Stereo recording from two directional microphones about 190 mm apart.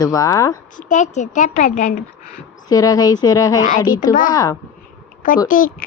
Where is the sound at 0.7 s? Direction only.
40° left (ahead or behind).